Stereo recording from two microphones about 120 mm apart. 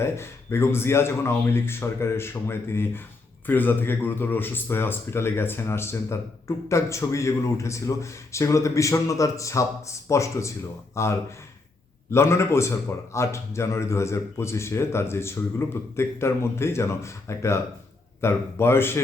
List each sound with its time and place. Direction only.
0.0 s speech: 20° left (ahead or behind)
12.1 s speech: 20° left (ahead or behind)